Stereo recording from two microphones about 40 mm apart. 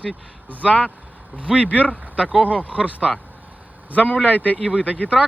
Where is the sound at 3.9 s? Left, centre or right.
Left.